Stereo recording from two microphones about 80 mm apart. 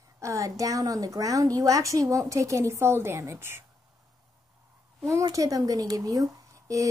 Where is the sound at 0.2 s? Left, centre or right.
Right.